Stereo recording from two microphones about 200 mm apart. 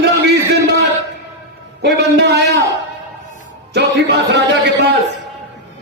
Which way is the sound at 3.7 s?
55° right (ahead or behind).